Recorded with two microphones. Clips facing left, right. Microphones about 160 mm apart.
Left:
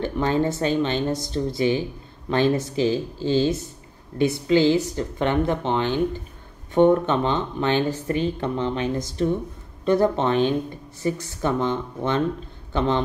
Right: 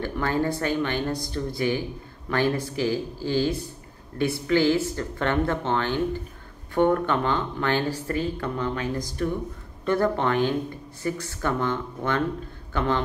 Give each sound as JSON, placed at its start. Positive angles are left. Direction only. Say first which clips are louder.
{"t": 0.0, "sound": "speech", "louder": "left 3 dB", "side_deg": 20}